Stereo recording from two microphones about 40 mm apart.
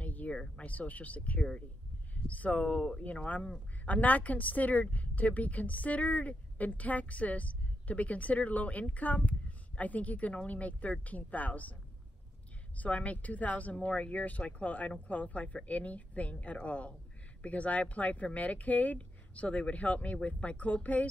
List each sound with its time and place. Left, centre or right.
0.0 s a sound: left
0.6 s a woman's voice: left
12.7 s a woman's voice: left